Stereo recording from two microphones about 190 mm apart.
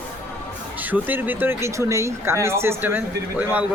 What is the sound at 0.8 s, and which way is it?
Speech, 10° right (ahead or behind).